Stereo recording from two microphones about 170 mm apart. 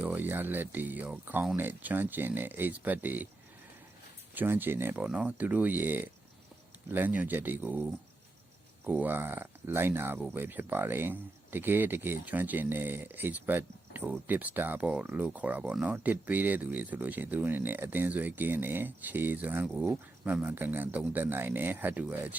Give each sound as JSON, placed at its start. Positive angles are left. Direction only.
{"t": 0.0, "sound": "speech", "side_deg": -10}
{"t": 4.4, "sound": "speech", "side_deg": -10}